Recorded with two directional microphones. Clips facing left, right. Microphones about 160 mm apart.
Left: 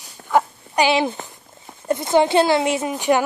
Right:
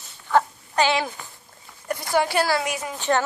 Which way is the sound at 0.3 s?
15° left (ahead or behind).